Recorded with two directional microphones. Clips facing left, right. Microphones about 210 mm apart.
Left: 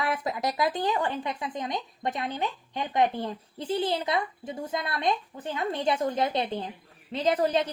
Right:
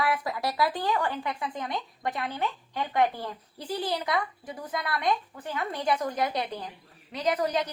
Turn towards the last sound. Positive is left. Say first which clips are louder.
# left 3 dB
turn(degrees=30)  # may be behind; listen again after turning